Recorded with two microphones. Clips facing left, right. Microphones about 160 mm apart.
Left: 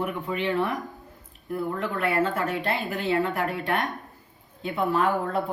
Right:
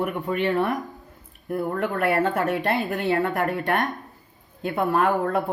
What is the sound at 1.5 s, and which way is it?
Speech, 55° right (ahead or behind).